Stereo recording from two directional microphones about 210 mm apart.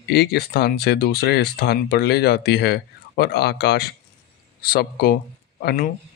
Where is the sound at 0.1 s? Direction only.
50° left (ahead or behind).